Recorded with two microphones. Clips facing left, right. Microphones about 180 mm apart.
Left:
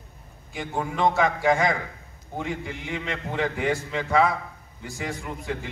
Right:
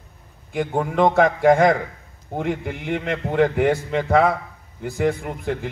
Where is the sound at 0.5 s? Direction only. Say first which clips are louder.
Right 7 dB; 55° right (ahead or behind).